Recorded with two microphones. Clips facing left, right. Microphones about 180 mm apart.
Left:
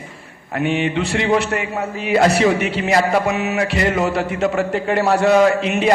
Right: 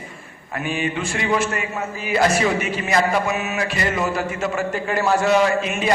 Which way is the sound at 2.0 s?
65° left (ahead or behind).